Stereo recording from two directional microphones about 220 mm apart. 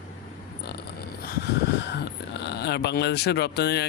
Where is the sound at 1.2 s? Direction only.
45° left (ahead or behind).